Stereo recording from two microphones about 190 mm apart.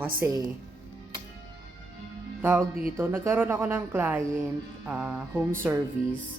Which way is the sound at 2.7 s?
50° right (ahead or behind).